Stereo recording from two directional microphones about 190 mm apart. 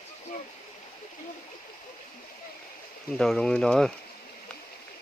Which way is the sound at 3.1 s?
5° left (ahead or behind).